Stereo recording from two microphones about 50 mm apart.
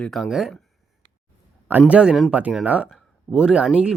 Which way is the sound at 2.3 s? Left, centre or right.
Right.